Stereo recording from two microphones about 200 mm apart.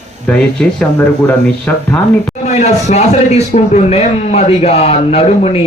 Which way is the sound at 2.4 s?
35° left (ahead or behind).